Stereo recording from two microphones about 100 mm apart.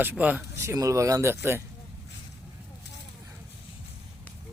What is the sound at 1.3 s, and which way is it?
Speech, 20° right (ahead or behind).